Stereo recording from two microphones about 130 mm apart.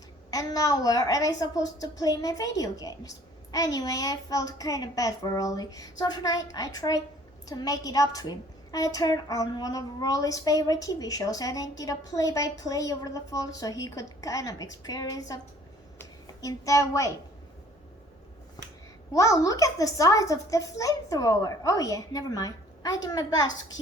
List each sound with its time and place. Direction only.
0.3 s a woman's voice: 30° left (ahead or behind)
16.0 s a sound: 25° left (ahead or behind)
19.1 s a woman's voice: 25° left (ahead or behind)